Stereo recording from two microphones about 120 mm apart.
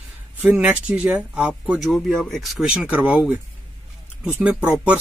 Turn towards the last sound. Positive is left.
turn(degrees=-10)  # may be behind; listen again after turning